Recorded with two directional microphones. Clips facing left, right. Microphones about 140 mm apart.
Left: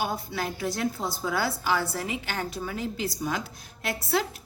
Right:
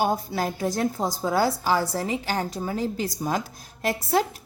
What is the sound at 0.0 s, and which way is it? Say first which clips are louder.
A woman's voice: right 6 dB; 45° right (ahead or behind).